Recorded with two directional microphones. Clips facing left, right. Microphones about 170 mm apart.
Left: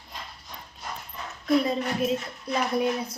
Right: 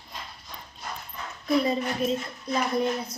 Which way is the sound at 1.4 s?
Centre (ahead or behind).